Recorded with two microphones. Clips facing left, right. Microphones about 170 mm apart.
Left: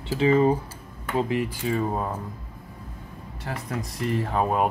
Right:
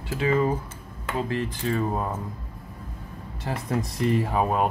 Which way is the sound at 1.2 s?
15° left (ahead or behind).